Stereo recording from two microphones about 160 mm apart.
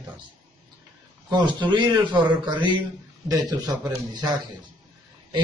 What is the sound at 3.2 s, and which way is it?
A man's voice, 25° right (ahead or behind).